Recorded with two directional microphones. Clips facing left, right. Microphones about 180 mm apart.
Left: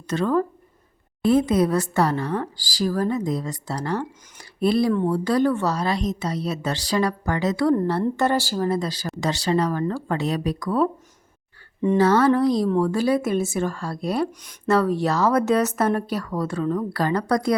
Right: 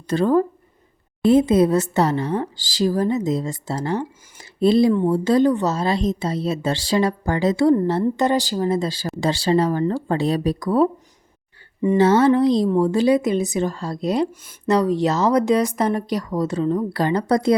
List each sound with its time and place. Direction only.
0.1 s a woman's voice: 35° right (ahead or behind)
11.9 s a woman's voice: 25° right (ahead or behind)